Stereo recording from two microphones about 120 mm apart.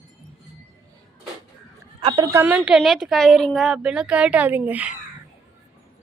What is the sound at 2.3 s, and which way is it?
A woman's voice, 15° right (ahead or behind).